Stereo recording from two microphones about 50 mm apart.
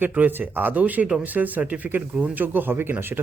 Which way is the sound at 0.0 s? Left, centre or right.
Right.